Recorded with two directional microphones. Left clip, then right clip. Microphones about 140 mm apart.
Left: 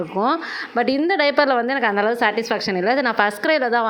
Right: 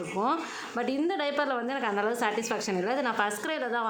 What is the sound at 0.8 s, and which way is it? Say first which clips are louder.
A woman's voice: left 11 dB; 35° left (ahead or behind).